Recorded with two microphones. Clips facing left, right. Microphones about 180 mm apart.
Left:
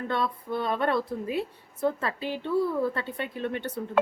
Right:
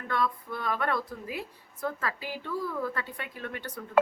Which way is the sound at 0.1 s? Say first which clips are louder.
Even; 25° left (ahead or behind).